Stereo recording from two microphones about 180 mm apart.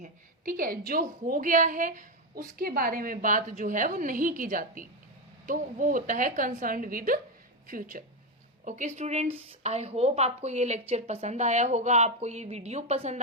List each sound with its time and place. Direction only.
0.0 s a woman's voice: 50° right (ahead or behind)